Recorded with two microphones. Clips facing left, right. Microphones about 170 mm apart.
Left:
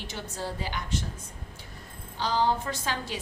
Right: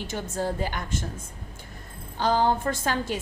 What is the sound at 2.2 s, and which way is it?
A woman's voice, 50° right (ahead or behind).